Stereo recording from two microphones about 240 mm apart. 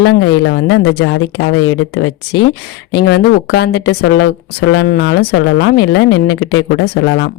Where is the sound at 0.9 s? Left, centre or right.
Left.